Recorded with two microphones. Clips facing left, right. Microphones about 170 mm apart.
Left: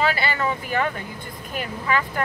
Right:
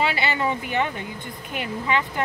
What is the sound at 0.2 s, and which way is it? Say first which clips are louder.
Speech: even; 25° right (ahead or behind).